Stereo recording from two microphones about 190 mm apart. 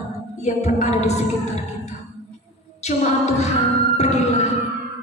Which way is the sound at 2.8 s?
35° left (ahead or behind).